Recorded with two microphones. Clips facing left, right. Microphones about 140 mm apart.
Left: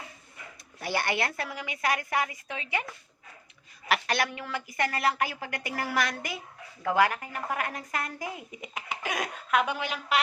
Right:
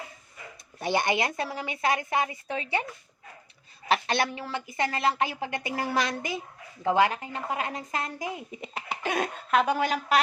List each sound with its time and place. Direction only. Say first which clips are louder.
0.8 s a woman's voice: right 3 dB; 20° right (ahead or behind)
3.8 s a woman's voice: right 2 dB; 25° right (ahead or behind)